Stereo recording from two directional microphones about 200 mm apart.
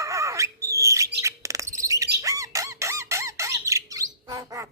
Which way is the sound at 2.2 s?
15° right (ahead or behind).